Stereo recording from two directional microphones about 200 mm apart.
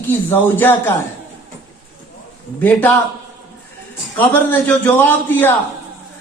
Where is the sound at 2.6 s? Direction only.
10° left (ahead or behind).